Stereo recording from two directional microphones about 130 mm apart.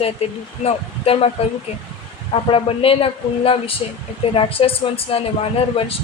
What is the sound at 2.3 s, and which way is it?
Speech, 45° left (ahead or behind).